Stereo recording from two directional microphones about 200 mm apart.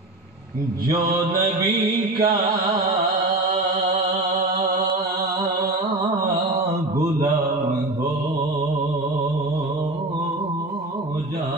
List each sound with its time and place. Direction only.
1.3 s mantra: 50° right (ahead or behind)